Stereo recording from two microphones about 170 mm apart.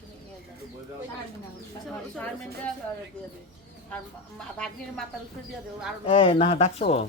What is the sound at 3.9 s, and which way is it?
Chicken, 5° left (ahead or behind).